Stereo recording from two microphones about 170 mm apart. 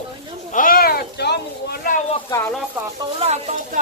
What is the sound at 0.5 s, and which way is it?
Speech, 55° left (ahead or behind).